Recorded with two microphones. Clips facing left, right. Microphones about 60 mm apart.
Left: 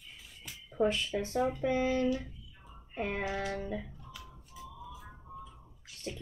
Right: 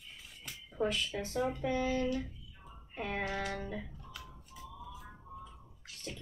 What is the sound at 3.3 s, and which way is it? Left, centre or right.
Speech, centre.